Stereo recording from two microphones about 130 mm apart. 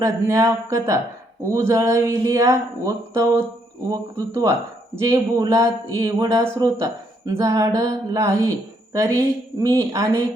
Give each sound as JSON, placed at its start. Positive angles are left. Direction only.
{"t": 0.0, "sound": "speech", "side_deg": -25}